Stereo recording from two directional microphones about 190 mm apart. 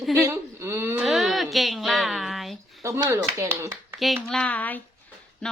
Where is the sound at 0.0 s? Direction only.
Centre (ahead or behind).